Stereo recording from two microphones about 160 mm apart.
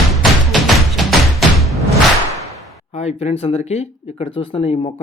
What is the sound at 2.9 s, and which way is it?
Speech, 45° left (ahead or behind).